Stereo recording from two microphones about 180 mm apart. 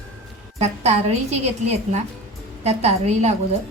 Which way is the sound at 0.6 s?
35° right (ahead or behind).